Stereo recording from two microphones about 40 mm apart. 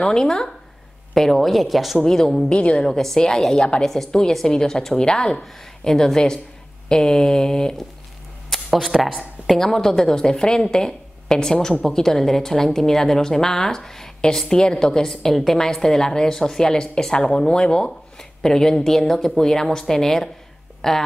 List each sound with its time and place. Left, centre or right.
0.0 s a woman's voice: centre
2.0 s a woman's voice: centre
2.5 s a woman's voice: left
2.9 s a woman's voice: centre
3.5 s a woman's voice: left
3.8 s a woman's voice: centre
8.5 s a sound: centre
8.9 s speech: centre
9.6 s a woman's voice: centre